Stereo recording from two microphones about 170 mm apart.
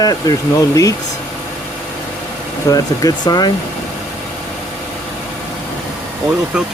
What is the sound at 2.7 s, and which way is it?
Speech, 20° left (ahead or behind).